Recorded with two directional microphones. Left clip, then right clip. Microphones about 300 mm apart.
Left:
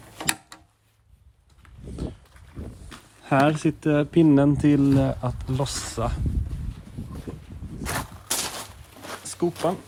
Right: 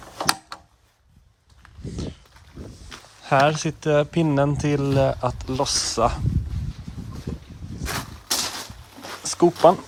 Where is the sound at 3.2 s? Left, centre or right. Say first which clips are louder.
Right 2 dB; centre.